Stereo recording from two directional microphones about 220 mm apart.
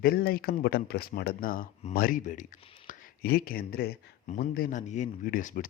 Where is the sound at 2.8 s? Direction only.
40° left (ahead or behind).